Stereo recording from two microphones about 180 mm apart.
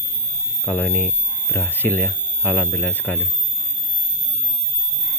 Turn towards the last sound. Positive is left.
turn(degrees=10)  # may be behind; listen again after turning